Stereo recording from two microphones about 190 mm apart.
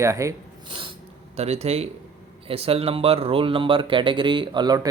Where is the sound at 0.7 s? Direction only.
25° right (ahead or behind).